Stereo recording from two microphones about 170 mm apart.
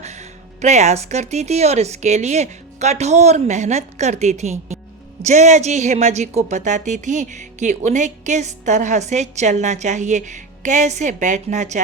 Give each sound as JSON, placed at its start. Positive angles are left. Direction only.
{"t": 0.0, "sound": "a woman's voice", "side_deg": -40}